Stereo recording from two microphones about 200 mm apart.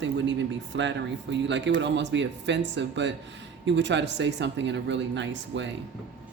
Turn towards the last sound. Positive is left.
turn(degrees=-65)  # may be behind; listen again after turning